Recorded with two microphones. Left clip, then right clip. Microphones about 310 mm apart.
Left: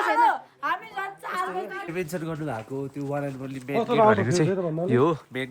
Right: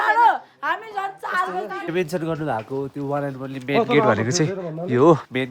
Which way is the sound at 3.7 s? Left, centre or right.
Right.